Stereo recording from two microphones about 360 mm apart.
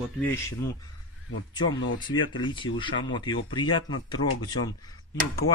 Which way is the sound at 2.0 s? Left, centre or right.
Centre.